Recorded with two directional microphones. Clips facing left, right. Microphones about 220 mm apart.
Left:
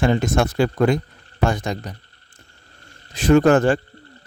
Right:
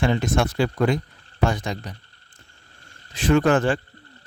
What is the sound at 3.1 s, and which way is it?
Speech, 40° left (ahead or behind).